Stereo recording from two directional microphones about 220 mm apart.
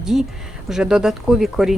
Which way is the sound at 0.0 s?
Centre (ahead or behind).